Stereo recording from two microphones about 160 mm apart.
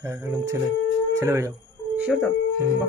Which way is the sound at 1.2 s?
20° right (ahead or behind).